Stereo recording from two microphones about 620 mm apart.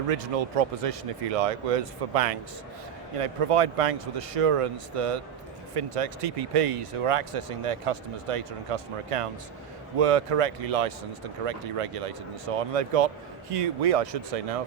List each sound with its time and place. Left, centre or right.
0.1 s speech: right